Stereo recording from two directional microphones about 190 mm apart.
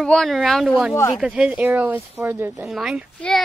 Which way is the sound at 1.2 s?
5° right (ahead or behind).